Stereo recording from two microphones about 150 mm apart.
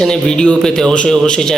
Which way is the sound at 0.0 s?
5° left (ahead or behind).